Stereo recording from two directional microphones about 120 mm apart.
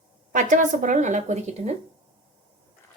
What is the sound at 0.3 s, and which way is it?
A woman's voice, 90° right.